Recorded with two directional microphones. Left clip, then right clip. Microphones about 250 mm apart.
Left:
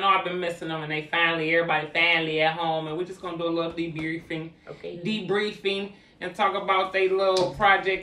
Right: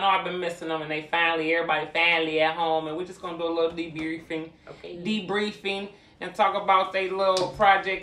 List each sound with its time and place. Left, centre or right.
0.0 s speech: centre